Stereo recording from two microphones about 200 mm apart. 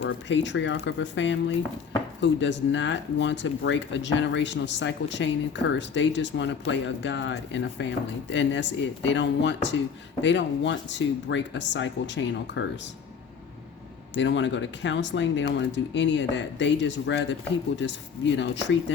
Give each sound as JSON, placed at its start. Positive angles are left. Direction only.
{"t": 0.0, "sound": "speech", "side_deg": 65}
{"t": 14.1, "sound": "speech", "side_deg": 65}